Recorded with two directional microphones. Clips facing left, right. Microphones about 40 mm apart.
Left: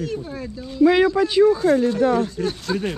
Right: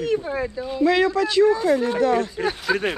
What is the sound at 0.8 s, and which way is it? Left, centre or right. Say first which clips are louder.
Speech: left 3 dB; centre.